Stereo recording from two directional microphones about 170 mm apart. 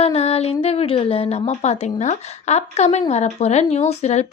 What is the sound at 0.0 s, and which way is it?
A woman's voice, 35° left (ahead or behind).